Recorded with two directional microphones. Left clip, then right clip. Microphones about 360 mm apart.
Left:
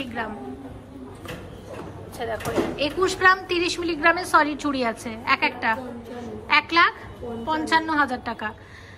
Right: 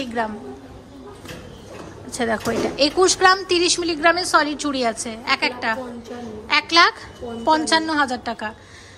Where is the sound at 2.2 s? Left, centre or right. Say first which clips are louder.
Right 4 dB; centre.